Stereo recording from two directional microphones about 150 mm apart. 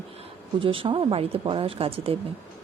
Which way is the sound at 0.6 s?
35° right (ahead or behind).